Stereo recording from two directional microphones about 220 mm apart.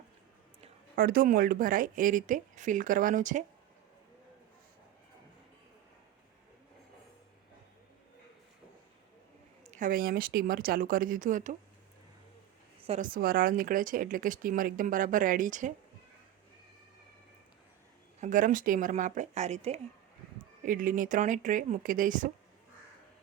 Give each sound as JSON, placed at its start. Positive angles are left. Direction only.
{"t": 0.9, "sound": "speech", "side_deg": -40}
{"t": 9.7, "sound": "speech", "side_deg": -40}
{"t": 12.9, "sound": "speech", "side_deg": -40}
{"t": 18.2, "sound": "speech", "side_deg": -35}